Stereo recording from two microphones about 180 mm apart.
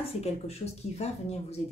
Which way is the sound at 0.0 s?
35° left (ahead or behind).